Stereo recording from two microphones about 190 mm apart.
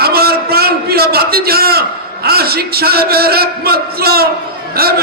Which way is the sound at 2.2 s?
55° right (ahead or behind).